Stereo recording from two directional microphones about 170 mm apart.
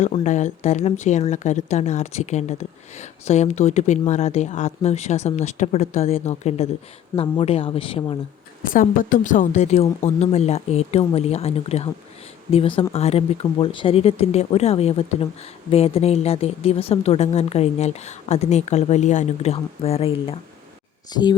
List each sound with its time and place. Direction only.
0.0 s speech: 45° left (ahead or behind)
8.7 s speech: 55° left (ahead or behind); by 21.3 s 25° left (ahead or behind)